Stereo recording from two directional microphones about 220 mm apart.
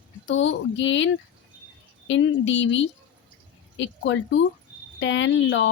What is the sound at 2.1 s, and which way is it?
Speech, 55° left (ahead or behind).